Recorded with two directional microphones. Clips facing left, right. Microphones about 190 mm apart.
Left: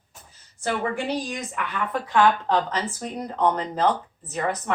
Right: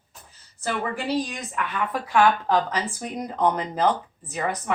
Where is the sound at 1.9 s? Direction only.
10° right (ahead or behind).